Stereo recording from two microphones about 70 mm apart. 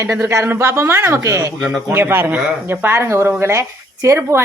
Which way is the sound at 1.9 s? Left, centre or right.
Right.